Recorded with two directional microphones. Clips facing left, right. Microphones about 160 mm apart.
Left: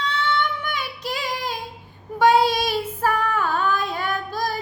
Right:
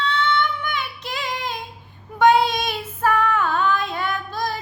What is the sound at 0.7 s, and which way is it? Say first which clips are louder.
Child singing: even; 10° left (ahead or behind).